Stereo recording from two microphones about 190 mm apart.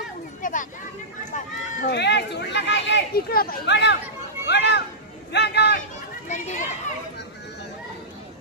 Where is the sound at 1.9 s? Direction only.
65° left (ahead or behind).